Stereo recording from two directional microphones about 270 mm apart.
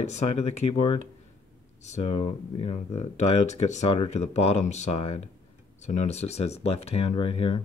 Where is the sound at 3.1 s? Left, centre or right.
Left.